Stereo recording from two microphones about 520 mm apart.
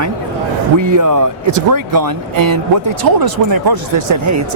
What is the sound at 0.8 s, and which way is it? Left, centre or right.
Speech, right.